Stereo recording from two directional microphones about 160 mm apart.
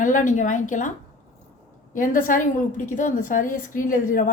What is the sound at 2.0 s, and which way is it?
A woman's voice, 55° left (ahead or behind).